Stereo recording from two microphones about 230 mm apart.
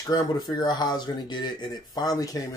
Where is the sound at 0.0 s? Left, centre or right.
Centre.